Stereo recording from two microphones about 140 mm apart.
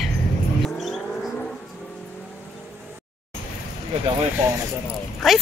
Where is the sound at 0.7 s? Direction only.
Centre (ahead or behind).